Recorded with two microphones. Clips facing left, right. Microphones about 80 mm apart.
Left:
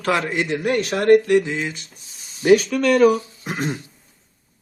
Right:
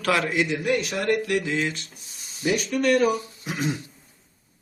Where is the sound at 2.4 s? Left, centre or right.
Left.